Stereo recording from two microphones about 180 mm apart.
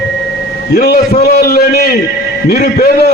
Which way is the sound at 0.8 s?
60° left (ahead or behind).